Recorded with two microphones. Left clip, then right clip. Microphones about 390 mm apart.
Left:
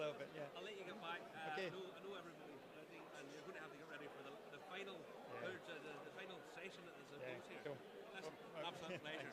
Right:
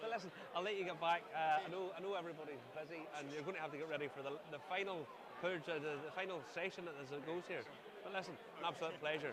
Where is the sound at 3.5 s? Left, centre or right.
Right.